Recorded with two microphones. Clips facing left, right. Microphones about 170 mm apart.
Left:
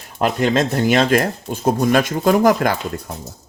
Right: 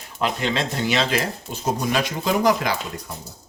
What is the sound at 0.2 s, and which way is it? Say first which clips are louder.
Speech: left 7 dB; 45° left (ahead or behind).